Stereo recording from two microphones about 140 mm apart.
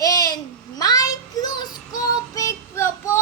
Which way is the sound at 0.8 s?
25° left (ahead or behind).